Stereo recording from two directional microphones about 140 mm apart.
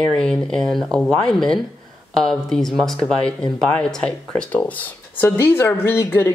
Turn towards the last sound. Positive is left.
turn(degrees=15)  # may be behind; listen again after turning